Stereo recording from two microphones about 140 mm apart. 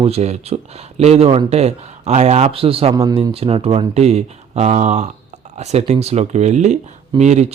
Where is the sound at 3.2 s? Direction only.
45° right (ahead or behind).